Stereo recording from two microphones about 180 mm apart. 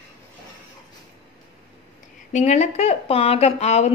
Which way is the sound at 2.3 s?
40° left (ahead or behind).